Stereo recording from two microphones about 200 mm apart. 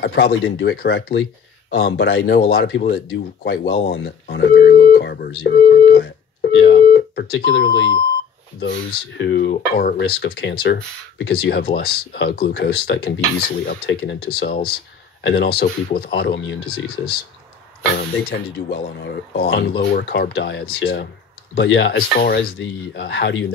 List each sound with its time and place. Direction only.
0.0 s speech: 55° left (ahead or behind)
3.9 s a sound: 55° left (ahead or behind)
9.2 s speech: 55° left (ahead or behind)
18.9 s speech: 50° left (ahead or behind)